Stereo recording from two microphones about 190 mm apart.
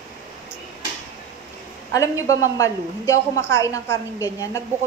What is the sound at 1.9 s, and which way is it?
A woman's voice, 15° left (ahead or behind).